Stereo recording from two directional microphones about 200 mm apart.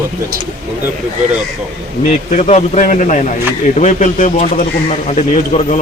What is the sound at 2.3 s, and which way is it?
A man's voice, 35° left (ahead or behind).